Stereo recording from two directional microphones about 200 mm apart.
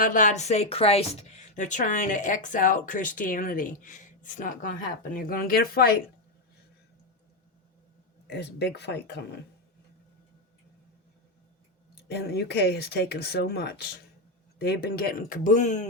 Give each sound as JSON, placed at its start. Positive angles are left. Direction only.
{"t": 0.0, "sound": "a woman's voice", "side_deg": 40}
{"t": 8.3, "sound": "speech", "side_deg": 55}
{"t": 11.9, "sound": "speech", "side_deg": 55}